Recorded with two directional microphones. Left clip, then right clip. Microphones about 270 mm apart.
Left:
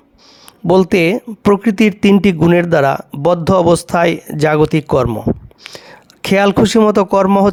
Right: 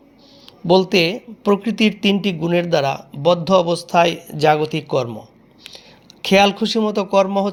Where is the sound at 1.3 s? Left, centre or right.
Left.